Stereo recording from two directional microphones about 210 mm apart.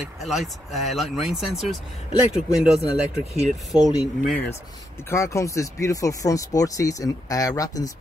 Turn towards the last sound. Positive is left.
turn(degrees=15)  # may be behind; listen again after turning